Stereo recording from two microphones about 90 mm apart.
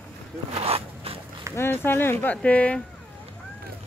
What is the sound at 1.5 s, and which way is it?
Speech, 25° left (ahead or behind).